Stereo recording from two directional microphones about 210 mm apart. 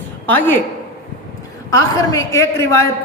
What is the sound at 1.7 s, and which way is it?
A woman's voice, 15° left (ahead or behind).